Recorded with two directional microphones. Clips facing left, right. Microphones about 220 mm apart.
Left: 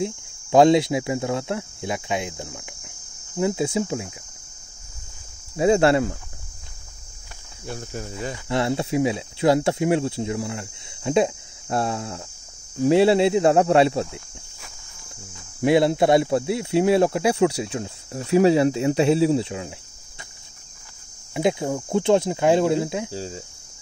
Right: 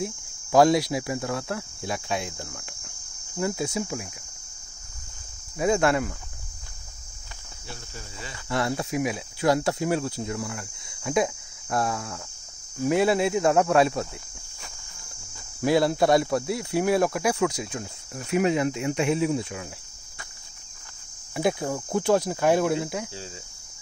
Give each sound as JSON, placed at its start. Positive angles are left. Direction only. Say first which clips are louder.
{"t": 0.0, "sound": "speech", "louder": "left 5 dB", "side_deg": 25}
{"t": 5.6, "sound": "speech", "louder": "left 5 dB", "side_deg": 30}
{"t": 7.6, "sound": "speech", "louder": "left 10 dB", "side_deg": 50}
{"t": 8.5, "sound": "speech", "louder": "left 3 dB", "side_deg": 25}
{"t": 15.6, "sound": "speech", "louder": "left 3 dB", "side_deg": 25}
{"t": 21.3, "sound": "speech", "louder": "left 3 dB", "side_deg": 20}
{"t": 23.1, "sound": "cricket", "louder": "left 8 dB", "side_deg": 40}